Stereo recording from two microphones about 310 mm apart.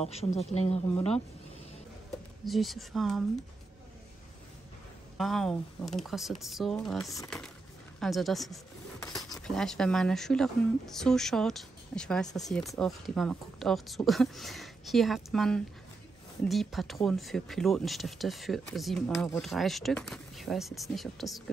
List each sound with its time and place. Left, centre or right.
0.0 s speech: centre
2.4 s speech: centre
5.1 s speech: centre
9.0 s speech: centre